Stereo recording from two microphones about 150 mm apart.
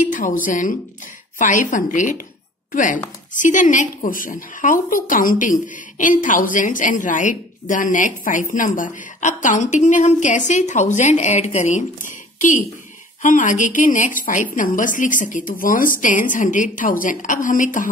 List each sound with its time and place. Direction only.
0.0 s a woman's voice: 60° left (ahead or behind)